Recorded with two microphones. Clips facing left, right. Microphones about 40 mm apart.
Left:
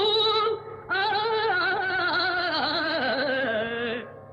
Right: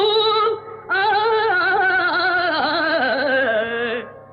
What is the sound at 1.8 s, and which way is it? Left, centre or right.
Gargling, right.